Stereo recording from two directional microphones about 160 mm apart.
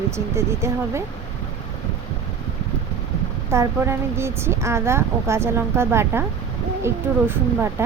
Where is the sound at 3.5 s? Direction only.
15° right (ahead or behind).